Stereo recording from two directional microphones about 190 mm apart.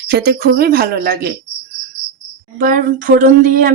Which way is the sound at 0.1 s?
55° right (ahead or behind).